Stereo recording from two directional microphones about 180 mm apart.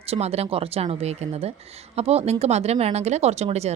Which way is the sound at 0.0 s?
35° right (ahead or behind).